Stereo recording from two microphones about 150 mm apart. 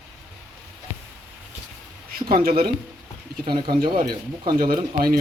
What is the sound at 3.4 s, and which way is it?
Speech, 30° right (ahead or behind).